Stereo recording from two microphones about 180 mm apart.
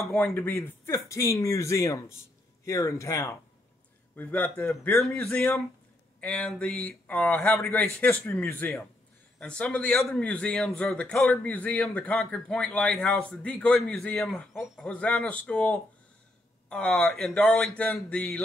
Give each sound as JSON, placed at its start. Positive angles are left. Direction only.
{"t": 0.0, "sound": "a man's voice", "side_deg": 15}